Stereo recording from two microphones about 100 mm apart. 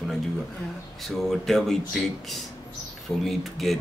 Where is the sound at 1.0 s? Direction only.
Centre (ahead or behind).